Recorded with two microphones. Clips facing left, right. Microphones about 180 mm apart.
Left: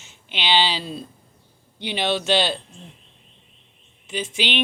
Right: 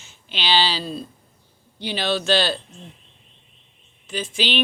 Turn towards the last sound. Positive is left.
turn(degrees=20)  # may be behind; listen again after turning